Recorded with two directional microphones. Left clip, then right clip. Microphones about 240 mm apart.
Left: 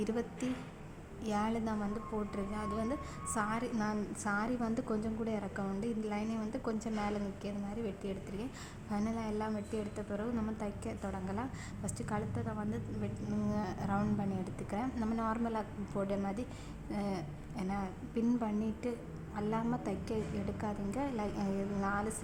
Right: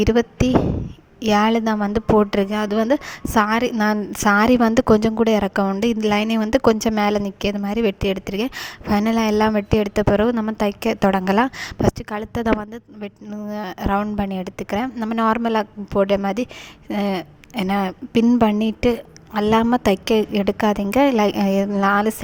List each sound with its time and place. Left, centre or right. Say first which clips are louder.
0.0 s a woman's voice: right 19 dB; right